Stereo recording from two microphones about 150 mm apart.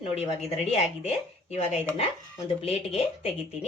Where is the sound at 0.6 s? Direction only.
45° left (ahead or behind).